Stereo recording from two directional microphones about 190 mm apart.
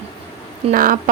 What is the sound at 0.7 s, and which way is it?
Speech, 45° right (ahead or behind).